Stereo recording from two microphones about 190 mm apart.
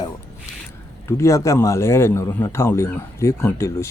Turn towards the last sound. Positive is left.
turn(degrees=15)  # may be behind; listen again after turning